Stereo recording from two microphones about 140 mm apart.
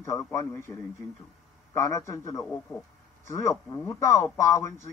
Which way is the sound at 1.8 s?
20° left (ahead or behind).